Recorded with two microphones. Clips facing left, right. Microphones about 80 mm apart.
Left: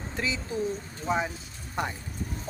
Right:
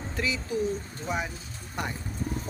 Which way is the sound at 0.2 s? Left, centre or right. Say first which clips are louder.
Right 1 dB; left.